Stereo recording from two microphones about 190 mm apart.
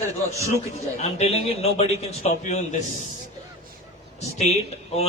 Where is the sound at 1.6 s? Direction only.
35° left (ahead or behind).